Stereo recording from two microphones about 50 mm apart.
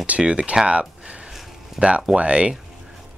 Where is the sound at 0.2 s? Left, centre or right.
Centre.